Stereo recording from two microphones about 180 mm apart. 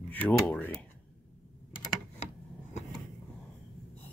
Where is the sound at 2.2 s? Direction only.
35° left (ahead or behind).